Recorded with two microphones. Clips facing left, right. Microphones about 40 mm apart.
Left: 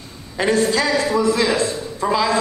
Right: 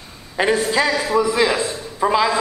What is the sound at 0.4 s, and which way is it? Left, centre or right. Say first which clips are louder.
Speech: even; centre.